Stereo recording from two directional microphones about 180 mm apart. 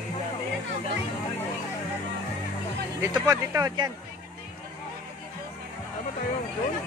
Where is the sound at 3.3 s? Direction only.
20° right (ahead or behind).